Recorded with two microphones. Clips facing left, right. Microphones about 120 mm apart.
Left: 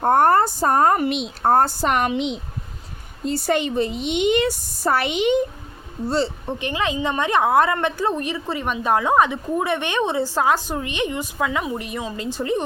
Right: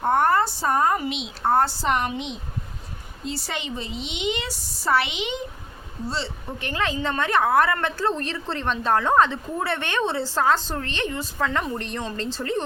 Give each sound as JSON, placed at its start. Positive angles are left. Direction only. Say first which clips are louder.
{"t": 0.0, "sound": "a woman's voice", "louder": "left 4 dB", "side_deg": 45}
{"t": 3.2, "sound": "a woman's voice", "louder": "left 10 dB", "side_deg": 50}
{"t": 6.4, "sound": "a woman's voice", "louder": "left 3 dB", "side_deg": 20}